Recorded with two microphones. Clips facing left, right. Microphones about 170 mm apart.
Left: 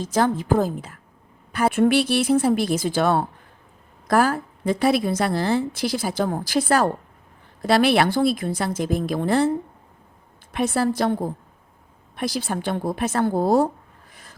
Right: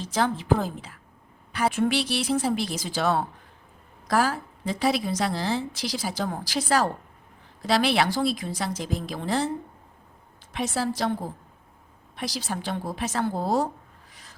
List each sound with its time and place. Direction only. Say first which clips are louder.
0.0 s a woman's voice: left 5 dB; 45° left (ahead or behind)
10.5 s a woman's voice: left 6 dB; 55° left (ahead or behind)
14.1 s a sound: left 6 dB; 50° left (ahead or behind)